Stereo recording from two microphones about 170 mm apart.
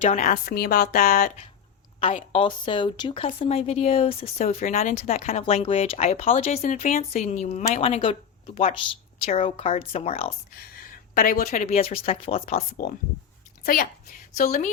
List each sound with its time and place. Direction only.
0.0 s speech: 40° left (ahead or behind)
0.4 s a woman's voice: 65° left (ahead or behind)
2.1 s speech: 30° left (ahead or behind)
11.1 s speech: 55° left (ahead or behind)
11.6 s a woman's voice: 35° left (ahead or behind)